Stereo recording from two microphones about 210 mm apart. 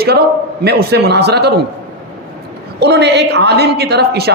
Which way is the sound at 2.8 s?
55° right (ahead or behind).